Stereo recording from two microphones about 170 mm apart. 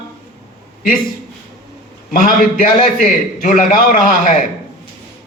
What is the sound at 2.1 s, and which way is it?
A man's voice, 50° left (ahead or behind).